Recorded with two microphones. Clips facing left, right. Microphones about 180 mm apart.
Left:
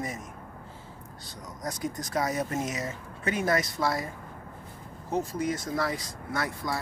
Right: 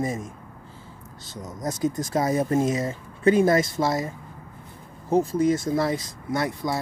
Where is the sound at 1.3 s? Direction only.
25° right (ahead or behind).